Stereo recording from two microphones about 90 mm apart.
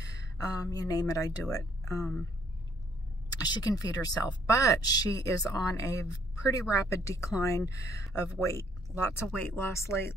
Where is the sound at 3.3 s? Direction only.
45° left (ahead or behind).